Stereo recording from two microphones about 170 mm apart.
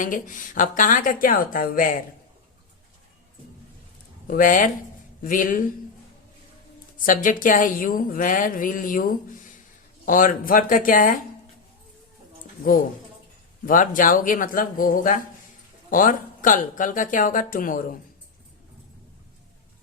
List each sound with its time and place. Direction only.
0.0 s a woman's voice: 50° left (ahead or behind)
4.3 s a woman's voice: 50° left (ahead or behind)
7.0 s a woman's voice: 50° left (ahead or behind)
13.7 s a woman's voice: 50° left (ahead or behind)